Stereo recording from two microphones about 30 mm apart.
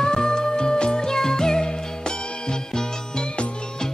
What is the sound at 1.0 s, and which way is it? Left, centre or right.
Music, centre.